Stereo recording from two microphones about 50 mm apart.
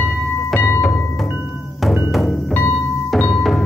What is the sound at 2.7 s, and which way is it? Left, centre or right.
Music, centre.